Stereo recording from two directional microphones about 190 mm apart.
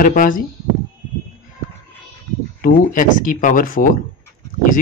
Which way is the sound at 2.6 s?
45° left (ahead or behind).